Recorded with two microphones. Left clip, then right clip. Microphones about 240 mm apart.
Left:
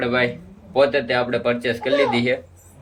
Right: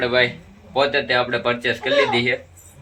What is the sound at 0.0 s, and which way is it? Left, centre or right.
Speech, centre.